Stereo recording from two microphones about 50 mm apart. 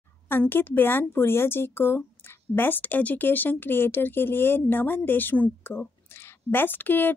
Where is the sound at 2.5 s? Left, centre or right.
Left.